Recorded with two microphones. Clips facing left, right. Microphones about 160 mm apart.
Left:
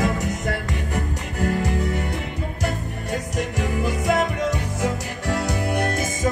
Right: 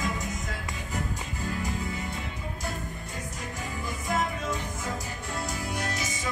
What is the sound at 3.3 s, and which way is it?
Music, 80° left.